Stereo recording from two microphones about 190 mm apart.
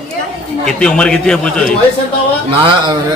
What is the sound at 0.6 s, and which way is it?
A man's voice, 5° left (ahead or behind).